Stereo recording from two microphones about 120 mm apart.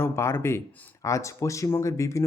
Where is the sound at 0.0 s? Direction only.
20° left (ahead or behind).